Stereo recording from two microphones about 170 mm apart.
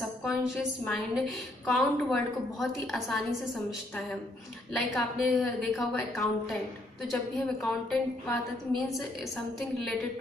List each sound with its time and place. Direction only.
0.0 s a sound: centre (ahead or behind)
0.5 s a woman's voice: centre (ahead or behind)
9.6 s a woman's voice: centre (ahead or behind)